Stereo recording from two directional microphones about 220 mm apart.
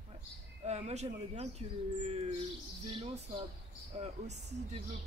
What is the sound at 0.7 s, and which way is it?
Speech, 30° right (ahead or behind).